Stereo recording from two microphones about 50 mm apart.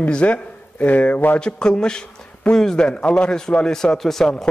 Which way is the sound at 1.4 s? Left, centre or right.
Centre.